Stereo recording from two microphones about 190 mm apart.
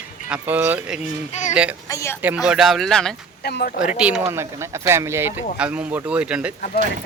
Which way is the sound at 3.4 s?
55° left (ahead or behind).